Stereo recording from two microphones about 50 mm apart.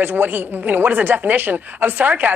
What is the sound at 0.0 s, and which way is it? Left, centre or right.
Speech, right.